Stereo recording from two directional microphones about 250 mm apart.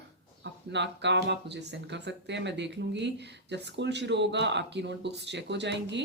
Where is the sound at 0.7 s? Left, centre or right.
Right.